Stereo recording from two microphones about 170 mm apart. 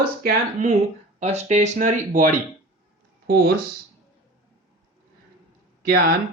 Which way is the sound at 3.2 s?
65° right (ahead or behind).